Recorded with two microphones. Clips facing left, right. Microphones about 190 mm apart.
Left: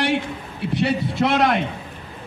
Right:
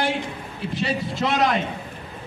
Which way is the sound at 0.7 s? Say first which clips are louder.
Left 5 dB; 65° left (ahead or behind).